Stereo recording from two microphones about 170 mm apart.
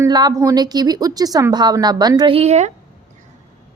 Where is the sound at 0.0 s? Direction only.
25° right (ahead or behind); by 2.7 s 40° right (ahead or behind).